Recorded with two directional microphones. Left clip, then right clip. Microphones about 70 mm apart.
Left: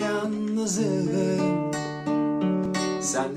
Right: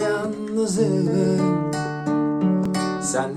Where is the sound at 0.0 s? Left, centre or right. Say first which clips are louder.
Right 4 dB; left.